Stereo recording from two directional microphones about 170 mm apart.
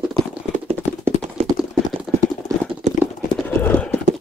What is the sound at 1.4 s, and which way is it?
Clip-clop, 40° right (ahead or behind).